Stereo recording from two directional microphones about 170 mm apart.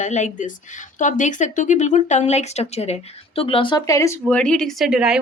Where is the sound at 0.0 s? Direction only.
45° left (ahead or behind).